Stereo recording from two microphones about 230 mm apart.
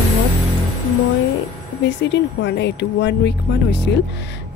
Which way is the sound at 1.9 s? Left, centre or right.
Left.